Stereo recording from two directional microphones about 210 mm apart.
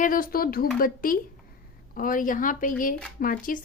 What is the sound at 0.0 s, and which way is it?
A woman's voice, 40° left (ahead or behind).